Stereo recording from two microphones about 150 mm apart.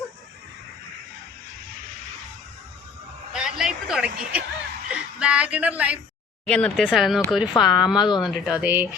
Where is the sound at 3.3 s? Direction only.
5° right (ahead or behind).